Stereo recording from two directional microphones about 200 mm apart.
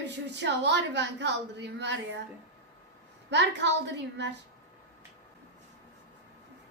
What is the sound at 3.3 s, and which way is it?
A woman's voice, 60° right (ahead or behind).